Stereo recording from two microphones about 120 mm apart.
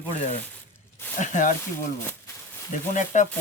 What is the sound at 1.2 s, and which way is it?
Sizzle, 90° left.